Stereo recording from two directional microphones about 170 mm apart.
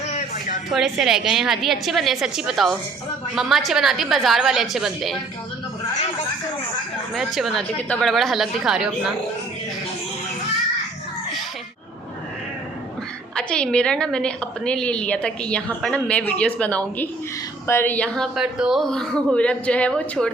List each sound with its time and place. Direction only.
0.1 s a sound: 50° left (ahead or behind)
0.7 s speech: centre (ahead or behind)
7.1 s speech: centre (ahead or behind)
13.3 s a woman's voice: 5° left (ahead or behind)